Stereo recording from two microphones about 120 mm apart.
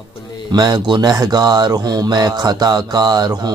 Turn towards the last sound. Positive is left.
turn(degrees=-35)  # may be behind; listen again after turning